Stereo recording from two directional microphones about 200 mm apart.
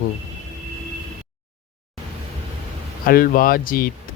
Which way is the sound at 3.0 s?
45° left (ahead or behind).